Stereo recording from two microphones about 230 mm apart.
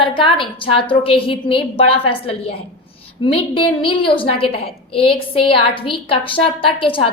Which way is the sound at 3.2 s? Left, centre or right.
Left.